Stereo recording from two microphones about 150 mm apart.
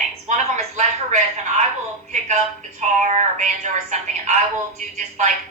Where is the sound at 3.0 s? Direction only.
55° right (ahead or behind).